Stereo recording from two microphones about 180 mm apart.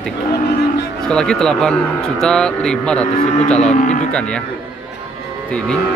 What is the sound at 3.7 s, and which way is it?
Livestock, 40° left (ahead or behind).